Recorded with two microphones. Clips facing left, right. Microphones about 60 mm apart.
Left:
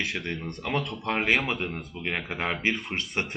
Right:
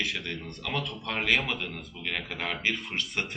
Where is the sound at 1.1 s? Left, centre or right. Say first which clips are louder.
Left 3 dB; left.